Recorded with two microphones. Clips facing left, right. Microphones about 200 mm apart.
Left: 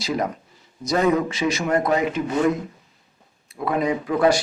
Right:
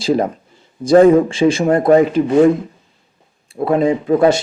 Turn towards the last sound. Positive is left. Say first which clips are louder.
# right 6 dB
turn(degrees=-25)  # may be behind; listen again after turning